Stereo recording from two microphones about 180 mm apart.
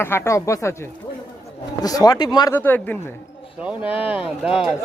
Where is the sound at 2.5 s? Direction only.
10° left (ahead or behind).